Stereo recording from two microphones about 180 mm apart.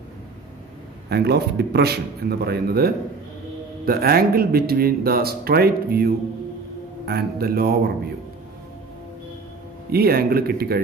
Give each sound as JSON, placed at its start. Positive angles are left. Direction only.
{"t": 1.1, "sound": "speech", "side_deg": -65}
{"t": 9.8, "sound": "speech", "side_deg": -60}